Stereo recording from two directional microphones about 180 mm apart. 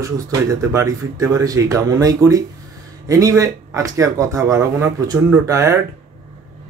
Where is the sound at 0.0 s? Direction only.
15° right (ahead or behind).